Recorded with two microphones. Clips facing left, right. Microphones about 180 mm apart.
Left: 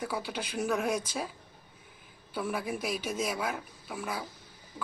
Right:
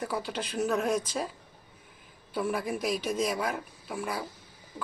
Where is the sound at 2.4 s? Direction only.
5° left (ahead or behind).